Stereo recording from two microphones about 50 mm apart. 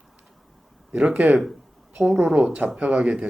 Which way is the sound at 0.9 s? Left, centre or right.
Centre.